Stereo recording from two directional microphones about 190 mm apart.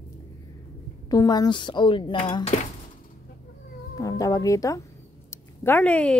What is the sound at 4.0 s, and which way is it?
Speech, 20° left (ahead or behind).